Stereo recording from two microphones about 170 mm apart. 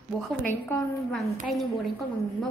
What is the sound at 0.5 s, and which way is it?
Speech, 15° left (ahead or behind).